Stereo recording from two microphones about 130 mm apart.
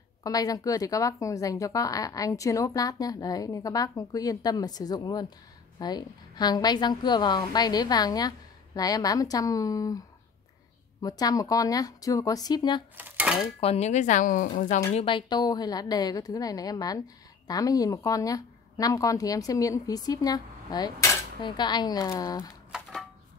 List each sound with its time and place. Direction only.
0.2 s a woman's voice: 30° left (ahead or behind)
12.9 s cutlery: 10° right (ahead or behind)
13.6 s speech: 50° left (ahead or behind); by 14.8 s 90° left
15.0 s a woman's voice: 40° left (ahead or behind)